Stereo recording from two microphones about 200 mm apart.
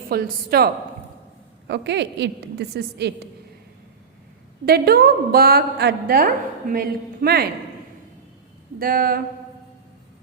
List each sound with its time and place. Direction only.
0.1 s a woman's voice: 50° right (ahead or behind)
1.6 s a woman's voice: 60° right (ahead or behind)
4.6 s a woman's voice: 50° right (ahead or behind)
8.8 s a woman's voice: 45° right (ahead or behind)